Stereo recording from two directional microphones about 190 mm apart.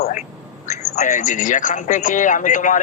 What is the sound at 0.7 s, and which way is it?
A man's voice, 40° left (ahead or behind).